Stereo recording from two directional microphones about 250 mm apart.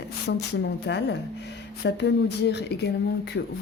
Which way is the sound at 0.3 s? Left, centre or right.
Left.